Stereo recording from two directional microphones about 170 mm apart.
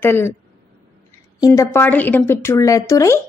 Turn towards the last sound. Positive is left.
turn(degrees=15)  # may be behind; listen again after turning